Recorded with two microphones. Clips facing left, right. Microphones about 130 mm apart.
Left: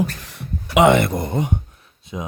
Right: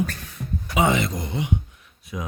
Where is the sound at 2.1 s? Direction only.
25° left (ahead or behind).